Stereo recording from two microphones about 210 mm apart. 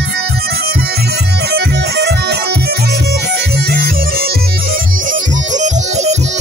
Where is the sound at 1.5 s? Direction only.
50° right (ahead or behind).